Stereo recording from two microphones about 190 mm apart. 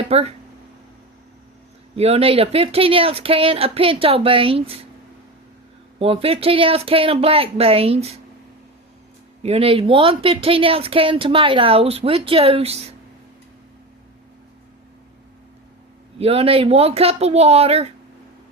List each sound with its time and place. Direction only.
0.1 s speech: 35° right (ahead or behind)
2.0 s speech: 30° right (ahead or behind)
6.0 s speech: 30° right (ahead or behind)
9.4 s speech: 30° right (ahead or behind)
16.1 s speech: 30° right (ahead or behind)